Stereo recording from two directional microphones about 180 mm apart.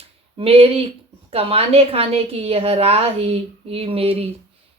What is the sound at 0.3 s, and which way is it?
Speech, 30° right (ahead or behind).